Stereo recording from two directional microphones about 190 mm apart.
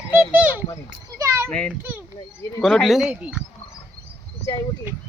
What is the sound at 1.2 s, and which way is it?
Children playing, 15° right (ahead or behind).